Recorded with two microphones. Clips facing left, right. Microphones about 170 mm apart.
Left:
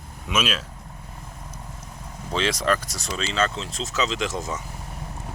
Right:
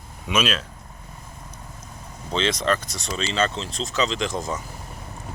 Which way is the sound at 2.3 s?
10° left (ahead or behind).